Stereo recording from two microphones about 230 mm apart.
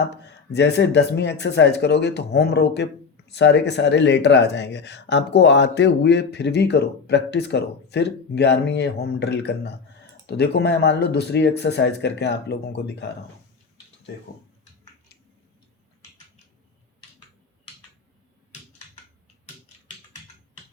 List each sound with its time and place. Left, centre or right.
0.1 s speech: left